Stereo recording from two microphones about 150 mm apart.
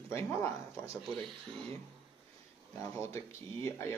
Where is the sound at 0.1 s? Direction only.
20° left (ahead or behind).